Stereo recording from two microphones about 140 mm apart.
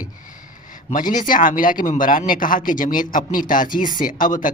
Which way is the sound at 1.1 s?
70° left (ahead or behind).